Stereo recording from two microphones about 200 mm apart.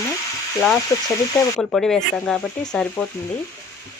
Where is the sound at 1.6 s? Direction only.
5° left (ahead or behind).